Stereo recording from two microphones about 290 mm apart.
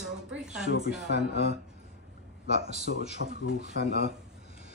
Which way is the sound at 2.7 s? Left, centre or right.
Right.